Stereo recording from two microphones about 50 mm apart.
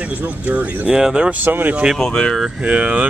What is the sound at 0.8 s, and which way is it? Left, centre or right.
Speech, centre.